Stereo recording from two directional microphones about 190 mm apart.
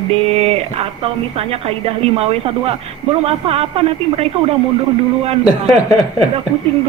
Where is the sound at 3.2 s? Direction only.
30° right (ahead or behind).